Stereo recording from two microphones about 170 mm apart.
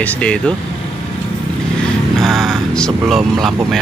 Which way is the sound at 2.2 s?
Centre (ahead or behind).